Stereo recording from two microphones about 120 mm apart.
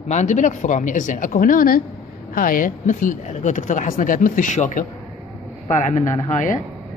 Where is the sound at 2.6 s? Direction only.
90° left.